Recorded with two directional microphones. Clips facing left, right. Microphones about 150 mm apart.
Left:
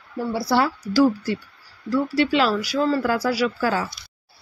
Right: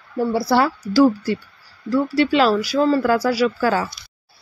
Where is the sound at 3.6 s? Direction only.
60° right (ahead or behind).